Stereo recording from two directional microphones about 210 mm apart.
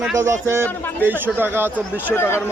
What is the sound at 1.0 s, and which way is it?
Speech, 10° right (ahead or behind).